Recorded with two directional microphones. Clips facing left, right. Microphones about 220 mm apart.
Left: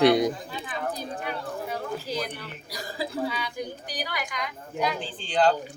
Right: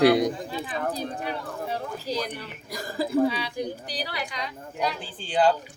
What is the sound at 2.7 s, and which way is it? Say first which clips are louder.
Speech: right 7 dB; 50° right (ahead or behind).